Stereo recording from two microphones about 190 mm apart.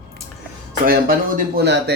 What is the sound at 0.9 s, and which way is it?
Speech, 50° right (ahead or behind).